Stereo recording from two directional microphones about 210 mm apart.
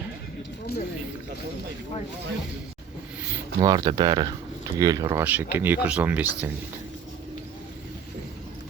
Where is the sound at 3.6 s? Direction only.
20° right (ahead or behind).